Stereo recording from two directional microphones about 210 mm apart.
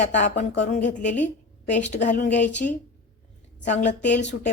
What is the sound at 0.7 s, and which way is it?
A woman's voice, 35° left (ahead or behind).